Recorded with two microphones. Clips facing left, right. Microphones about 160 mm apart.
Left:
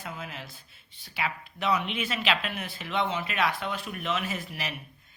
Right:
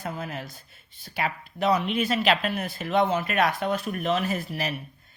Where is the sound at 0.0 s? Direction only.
45° right (ahead or behind).